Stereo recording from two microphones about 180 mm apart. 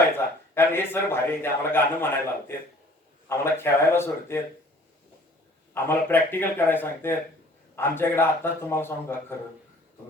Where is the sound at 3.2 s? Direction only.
15° left (ahead or behind).